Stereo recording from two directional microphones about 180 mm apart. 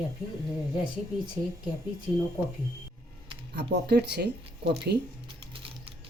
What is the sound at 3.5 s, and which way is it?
Speech, 65° right (ahead or behind).